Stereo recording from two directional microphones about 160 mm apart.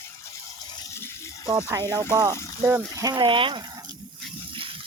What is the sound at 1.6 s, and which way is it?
Speech, 20° right (ahead or behind).